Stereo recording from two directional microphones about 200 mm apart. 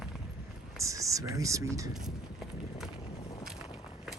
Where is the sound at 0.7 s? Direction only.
15° right (ahead or behind).